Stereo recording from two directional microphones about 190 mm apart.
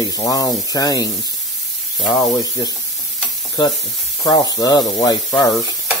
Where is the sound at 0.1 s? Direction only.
20° left (ahead or behind).